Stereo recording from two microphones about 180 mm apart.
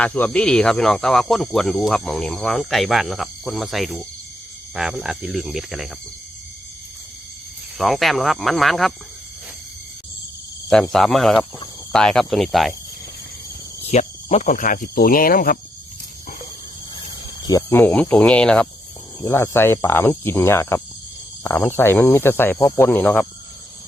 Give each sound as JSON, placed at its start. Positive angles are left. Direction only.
{"t": 0.0, "sound": "speech", "side_deg": 10}
{"t": 7.8, "sound": "speech", "side_deg": 0}
{"t": 10.7, "sound": "speech", "side_deg": 0}
{"t": 13.8, "sound": "speech", "side_deg": 40}
{"t": 17.4, "sound": "speech", "side_deg": 15}